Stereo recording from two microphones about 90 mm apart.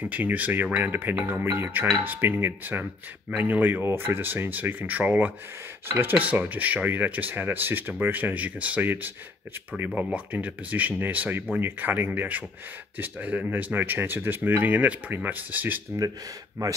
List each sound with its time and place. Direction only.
0.0 s speech: 15° right (ahead or behind)
10.1 s speech: 15° right (ahead or behind)